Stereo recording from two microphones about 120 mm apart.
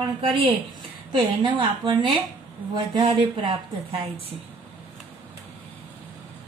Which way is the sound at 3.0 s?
45° right (ahead or behind).